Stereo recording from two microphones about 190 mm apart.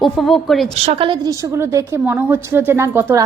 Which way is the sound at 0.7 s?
30° right (ahead or behind).